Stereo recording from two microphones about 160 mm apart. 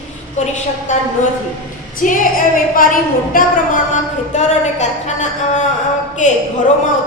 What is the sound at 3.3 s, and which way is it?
A woman's voice, 55° left (ahead or behind).